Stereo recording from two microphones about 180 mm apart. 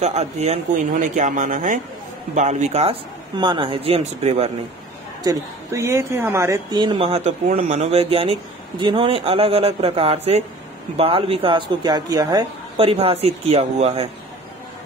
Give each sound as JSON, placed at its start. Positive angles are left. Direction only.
{"t": 0.0, "sound": "speech", "side_deg": -35}
{"t": 5.2, "sound": "speech", "side_deg": -20}